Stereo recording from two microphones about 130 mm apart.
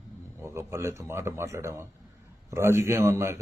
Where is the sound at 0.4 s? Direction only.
20° right (ahead or behind).